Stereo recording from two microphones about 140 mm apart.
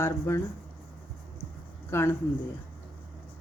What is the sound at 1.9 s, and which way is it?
Speech, 20° left (ahead or behind).